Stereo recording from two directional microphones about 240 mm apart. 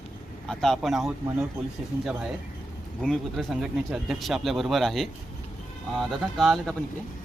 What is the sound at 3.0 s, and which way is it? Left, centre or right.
Speech, centre.